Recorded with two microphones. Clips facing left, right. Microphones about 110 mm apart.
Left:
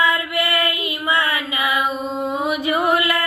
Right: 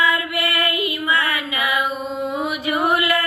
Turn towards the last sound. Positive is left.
turn(degrees=25)  # may be behind; listen again after turning